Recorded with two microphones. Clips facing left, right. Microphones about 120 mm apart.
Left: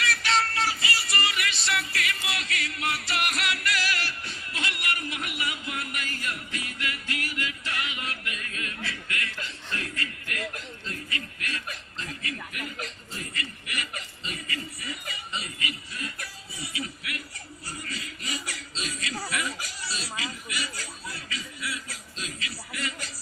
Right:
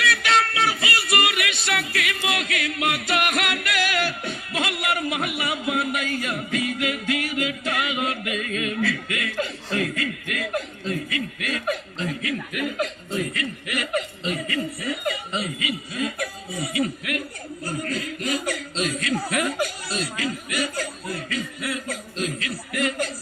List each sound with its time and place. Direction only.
0.0 s music: 60° right (ahead or behind); by 9.2 s 85° right
9.7 s a sound: 85° right
10.5 s chuckle: 70° right (ahead or behind); by 15.4 s 50° right (ahead or behind)
15.4 s chuckle: 80° right
16.2 s music: 60° right (ahead or behind)
17.7 s chuckle: 50° right (ahead or behind)